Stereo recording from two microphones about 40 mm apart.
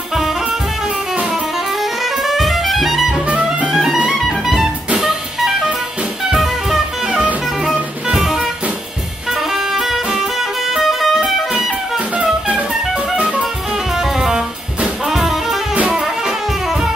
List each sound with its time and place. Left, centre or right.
2.2 s music: centre
3.7 s music: centre
4.3 s music: centre
9.5 s music: centre
12.2 s music: right
13.9 s music: centre
15.0 s jazz: centre